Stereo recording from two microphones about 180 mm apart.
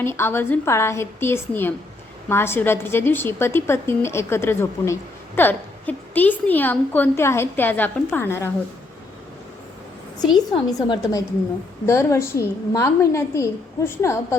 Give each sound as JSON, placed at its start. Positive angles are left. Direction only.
{"t": 0.0, "sound": "a woman's voice", "side_deg": 15}
{"t": 10.3, "sound": "a woman's voice", "side_deg": 25}